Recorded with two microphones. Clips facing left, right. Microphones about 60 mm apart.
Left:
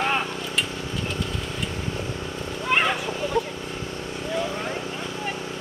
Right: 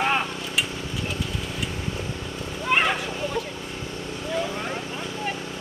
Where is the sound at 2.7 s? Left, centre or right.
Centre.